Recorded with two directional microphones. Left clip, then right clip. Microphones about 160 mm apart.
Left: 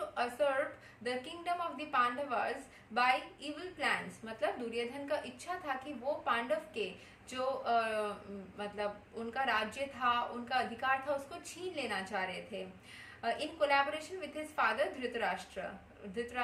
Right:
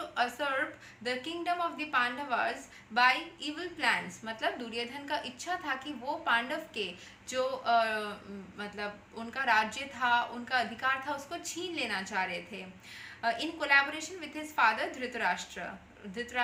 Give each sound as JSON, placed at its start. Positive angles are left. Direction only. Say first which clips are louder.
{"t": 0.1, "sound": "a sound", "louder": "right 2 dB", "side_deg": 20}
{"t": 1.0, "sound": "a woman's voice", "louder": "right 4 dB", "side_deg": 20}
{"t": 13.2, "sound": "a woman's voice", "louder": "right 2 dB", "side_deg": 15}